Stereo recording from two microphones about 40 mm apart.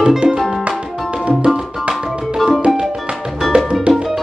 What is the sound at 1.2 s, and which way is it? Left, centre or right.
Music, right.